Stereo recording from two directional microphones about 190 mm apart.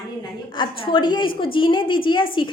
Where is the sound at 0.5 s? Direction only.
25° left (ahead or behind).